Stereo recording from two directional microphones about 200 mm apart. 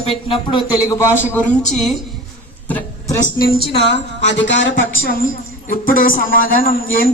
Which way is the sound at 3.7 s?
60° left (ahead or behind).